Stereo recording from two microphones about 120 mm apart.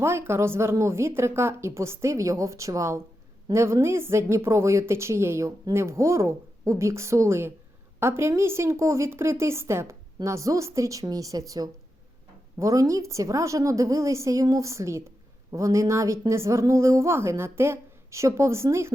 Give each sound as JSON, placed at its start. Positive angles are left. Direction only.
{"t": 0.0, "sound": "a woman's voice", "side_deg": -20}